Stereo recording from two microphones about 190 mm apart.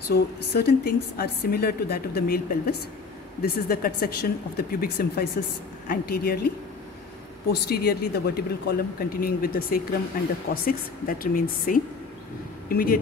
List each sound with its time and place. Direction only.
0.1 s a woman's voice: 55° left (ahead or behind)
7.6 s speech: 55° left (ahead or behind)